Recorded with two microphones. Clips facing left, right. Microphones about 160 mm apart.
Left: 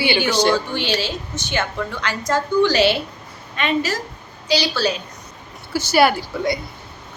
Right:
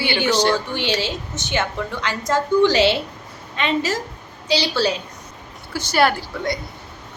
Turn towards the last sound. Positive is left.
turn(degrees=5)  # may be behind; listen again after turning